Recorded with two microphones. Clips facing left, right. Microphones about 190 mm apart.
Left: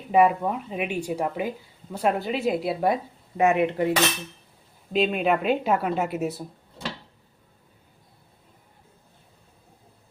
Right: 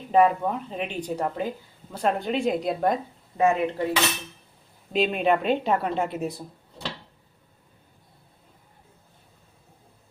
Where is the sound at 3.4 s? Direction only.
20° left (ahead or behind).